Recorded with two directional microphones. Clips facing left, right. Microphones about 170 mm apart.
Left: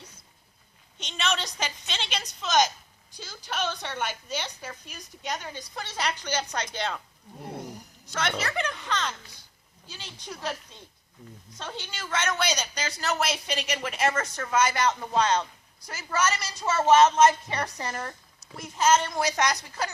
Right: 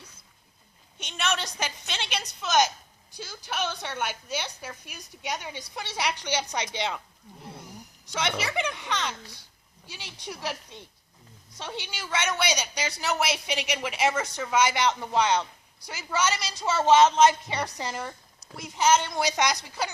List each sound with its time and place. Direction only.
0.9 s speech: 5° right (ahead or behind)
8.1 s speech: 15° right (ahead or behind)
11.9 s speech: 10° right (ahead or behind)